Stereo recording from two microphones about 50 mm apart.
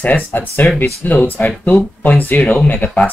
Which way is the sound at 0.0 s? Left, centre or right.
Left.